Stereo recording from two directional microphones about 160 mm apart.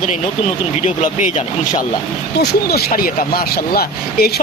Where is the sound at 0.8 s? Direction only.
45° left (ahead or behind).